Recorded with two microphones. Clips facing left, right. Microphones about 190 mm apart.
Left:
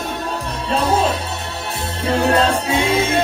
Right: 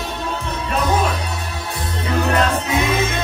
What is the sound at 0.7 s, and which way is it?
Music, 30° left (ahead or behind).